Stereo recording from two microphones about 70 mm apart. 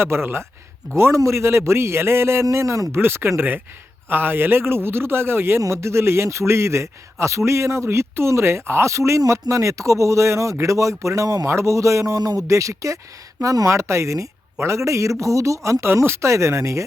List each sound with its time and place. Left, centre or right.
0.0 s a man's voice: right
3.0 s a man's voice: right